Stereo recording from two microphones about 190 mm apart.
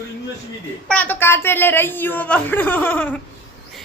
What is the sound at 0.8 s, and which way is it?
A woman's voice, 10° left (ahead or behind).